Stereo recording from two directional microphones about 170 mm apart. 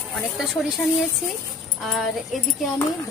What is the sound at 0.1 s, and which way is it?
Speech, centre (ahead or behind).